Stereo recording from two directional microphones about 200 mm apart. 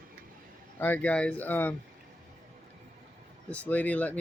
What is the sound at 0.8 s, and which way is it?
Speech, 5° left (ahead or behind).